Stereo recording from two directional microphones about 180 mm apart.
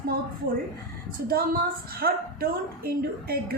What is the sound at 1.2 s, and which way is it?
A woman's voice, 55° right (ahead or behind).